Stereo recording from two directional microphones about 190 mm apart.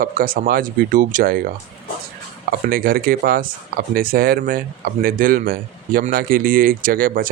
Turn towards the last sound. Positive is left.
turn(degrees=-50)  # may be behind; listen again after turning